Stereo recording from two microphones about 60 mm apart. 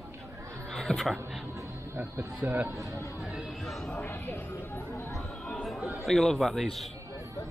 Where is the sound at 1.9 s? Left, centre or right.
Right.